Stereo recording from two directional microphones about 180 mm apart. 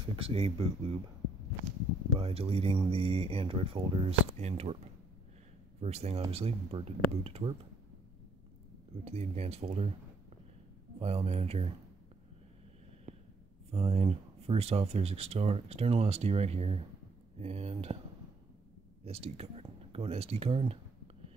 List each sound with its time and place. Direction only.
0.1 s speech: 30° right (ahead or behind)
2.1 s speech: 35° right (ahead or behind)
5.8 s speech: 35° right (ahead or behind)
9.0 s speech: 35° right (ahead or behind)
11.0 s speech: 35° right (ahead or behind)
13.1 s a sound: 40° right (ahead or behind)
13.7 s speech: 35° right (ahead or behind)
19.0 s speech: 35° right (ahead or behind)